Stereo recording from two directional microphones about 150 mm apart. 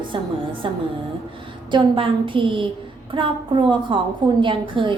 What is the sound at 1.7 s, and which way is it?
A woman's voice, 35° right (ahead or behind).